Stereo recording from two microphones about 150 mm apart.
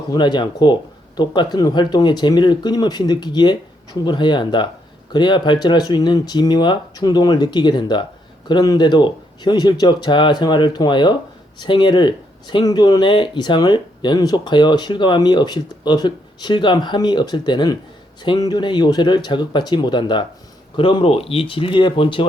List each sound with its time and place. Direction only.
0.1 s speech: 30° left (ahead or behind)